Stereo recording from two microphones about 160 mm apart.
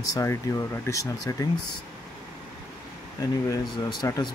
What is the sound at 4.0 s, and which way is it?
Speech, 25° left (ahead or behind).